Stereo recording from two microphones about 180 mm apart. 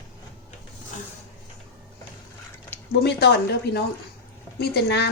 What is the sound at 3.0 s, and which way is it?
Speech, 65° left (ahead or behind).